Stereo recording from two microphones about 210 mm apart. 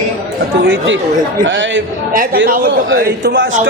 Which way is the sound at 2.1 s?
45° right (ahead or behind).